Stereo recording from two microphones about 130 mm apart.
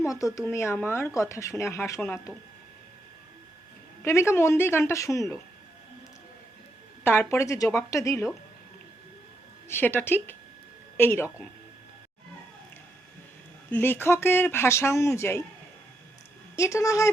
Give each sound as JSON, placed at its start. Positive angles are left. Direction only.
{"t": 0.0, "sound": "speech", "side_deg": 25}
{"t": 4.0, "sound": "speech", "side_deg": 20}
{"t": 7.0, "sound": "speech", "side_deg": 15}
{"t": 9.6, "sound": "a woman's voice", "side_deg": 15}
{"t": 13.7, "sound": "speech", "side_deg": 15}
{"t": 16.6, "sound": "speech", "side_deg": 20}